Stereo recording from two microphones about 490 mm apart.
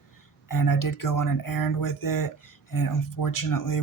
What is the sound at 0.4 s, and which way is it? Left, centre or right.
Speech, left.